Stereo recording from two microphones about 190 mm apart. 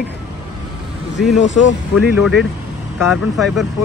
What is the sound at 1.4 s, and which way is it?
Speech, 75° left (ahead or behind).